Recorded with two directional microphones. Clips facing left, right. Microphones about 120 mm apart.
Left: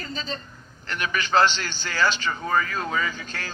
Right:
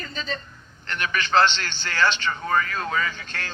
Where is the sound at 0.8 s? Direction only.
10° left (ahead or behind).